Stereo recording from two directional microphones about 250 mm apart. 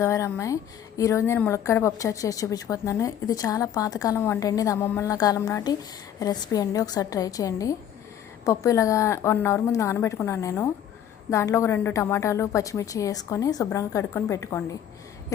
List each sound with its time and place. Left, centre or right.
0.0 s a woman's voice: centre